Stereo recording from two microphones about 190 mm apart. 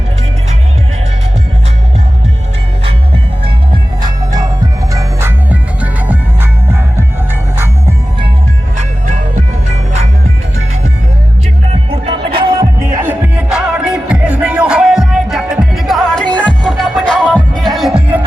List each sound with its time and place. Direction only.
3.4 s music: 25° right (ahead or behind)
5.5 s music: 10° right (ahead or behind)
12.5 s music: 15° right (ahead or behind)